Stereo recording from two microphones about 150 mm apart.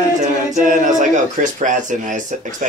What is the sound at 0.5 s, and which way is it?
Speech, 55° right (ahead or behind).